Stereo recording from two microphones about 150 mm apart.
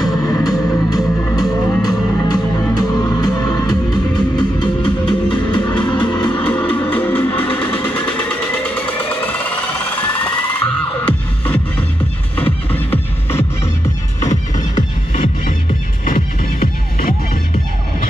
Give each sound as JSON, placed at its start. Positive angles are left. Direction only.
{"t": 0.0, "sound": "music", "side_deg": 25}
{"t": 6.4, "sound": "music", "side_deg": 10}
{"t": 12.4, "sound": "music", "side_deg": 10}
{"t": 16.1, "sound": "music", "side_deg": 65}